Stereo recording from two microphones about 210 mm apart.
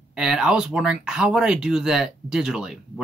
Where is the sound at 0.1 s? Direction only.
5° right (ahead or behind).